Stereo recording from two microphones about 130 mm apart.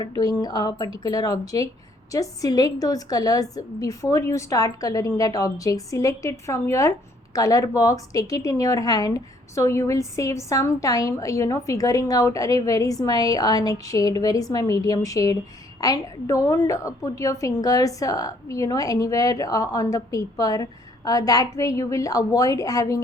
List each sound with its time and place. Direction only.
0.0 s a woman's voice: 30° left (ahead or behind)